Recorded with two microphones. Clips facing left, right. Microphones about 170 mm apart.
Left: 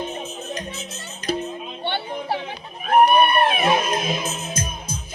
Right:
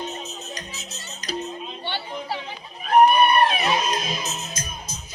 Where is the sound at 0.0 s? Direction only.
55° left (ahead or behind).